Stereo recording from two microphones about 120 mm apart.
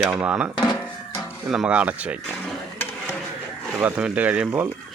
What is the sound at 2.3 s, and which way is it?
Stir, 10° left (ahead or behind).